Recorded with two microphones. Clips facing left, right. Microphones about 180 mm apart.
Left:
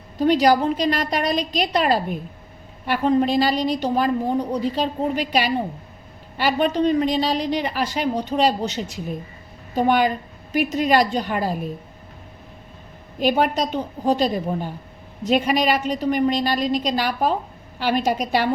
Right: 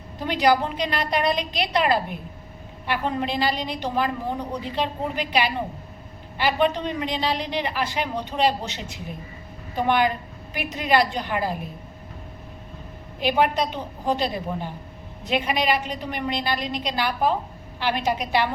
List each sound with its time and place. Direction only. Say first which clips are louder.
0.3 s a woman's voice: left 4 dB; 40° left (ahead or behind)
13.1 s a woman's voice: left 2 dB; 45° left (ahead or behind)